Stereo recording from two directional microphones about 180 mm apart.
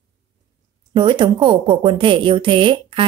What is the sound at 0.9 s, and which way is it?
A woman's voice, 25° right (ahead or behind).